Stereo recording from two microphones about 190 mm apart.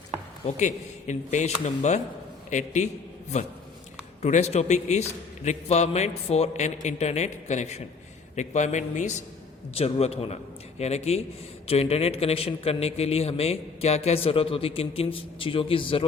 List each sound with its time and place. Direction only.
0.4 s a man's voice: 40° left (ahead or behind)
4.2 s a man's voice: 35° left (ahead or behind)